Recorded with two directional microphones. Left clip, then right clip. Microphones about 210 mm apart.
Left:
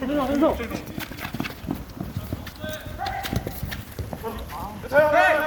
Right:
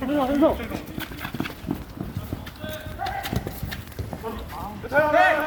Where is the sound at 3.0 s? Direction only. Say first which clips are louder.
Even; 5° right (ahead or behind).